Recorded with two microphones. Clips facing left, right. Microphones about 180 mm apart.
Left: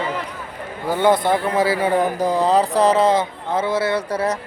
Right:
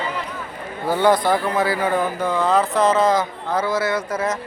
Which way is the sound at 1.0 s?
25° left (ahead or behind).